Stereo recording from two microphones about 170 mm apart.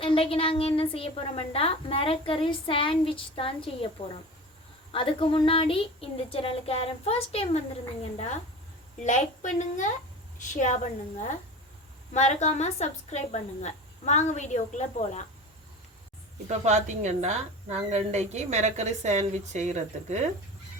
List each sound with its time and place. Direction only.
0.0 s a woman's voice: 30° left (ahead or behind)
9.0 s a woman's voice: 45° left (ahead or behind)
12.1 s a woman's voice: 45° left (ahead or behind)
16.5 s speech: 45° right (ahead or behind)